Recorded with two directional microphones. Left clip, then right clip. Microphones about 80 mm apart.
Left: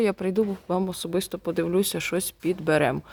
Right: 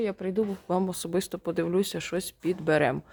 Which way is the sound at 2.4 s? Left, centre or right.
Left.